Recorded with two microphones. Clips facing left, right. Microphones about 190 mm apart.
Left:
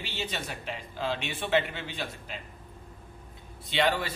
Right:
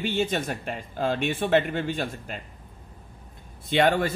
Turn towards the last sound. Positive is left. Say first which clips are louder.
# right 6 dB
turn(degrees=-50)  # may be behind; listen again after turning